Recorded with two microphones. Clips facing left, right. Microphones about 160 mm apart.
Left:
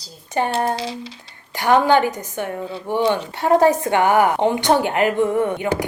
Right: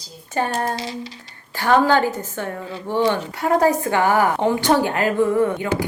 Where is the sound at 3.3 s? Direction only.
25° left (ahead or behind).